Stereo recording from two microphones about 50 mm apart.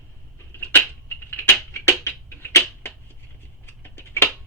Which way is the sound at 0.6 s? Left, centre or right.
Left.